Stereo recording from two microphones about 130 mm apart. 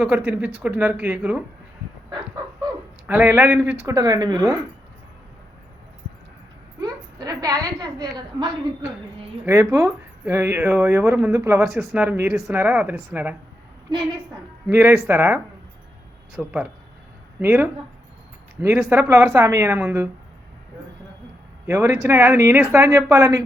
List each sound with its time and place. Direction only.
0.0 s speech: 10° right (ahead or behind)
3.1 s speech: 10° right (ahead or behind)
3.8 s speech: 25° right (ahead or behind)
6.8 s a sound: 30° right (ahead or behind)
9.7 s speech: 20° right (ahead or behind)
11.7 s speech: centre (ahead or behind)
11.9 s speech: 15° right (ahead or behind)
14.7 s speech: 15° right (ahead or behind)
16.4 s speech: 10° right (ahead or behind)
21.7 s speech: 20° right (ahead or behind)